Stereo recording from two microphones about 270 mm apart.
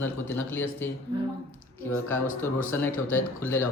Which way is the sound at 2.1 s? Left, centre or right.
Centre.